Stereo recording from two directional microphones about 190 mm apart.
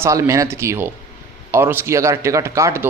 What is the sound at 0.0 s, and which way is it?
A man's voice, 15° right (ahead or behind).